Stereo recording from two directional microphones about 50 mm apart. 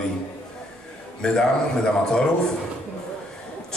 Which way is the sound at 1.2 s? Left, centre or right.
Centre.